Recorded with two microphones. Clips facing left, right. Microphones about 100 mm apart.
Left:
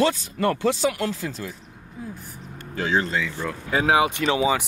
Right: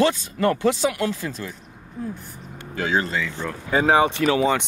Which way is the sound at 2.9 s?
Centre (ahead or behind).